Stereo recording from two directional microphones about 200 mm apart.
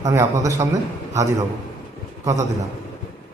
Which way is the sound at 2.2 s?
15° right (ahead or behind).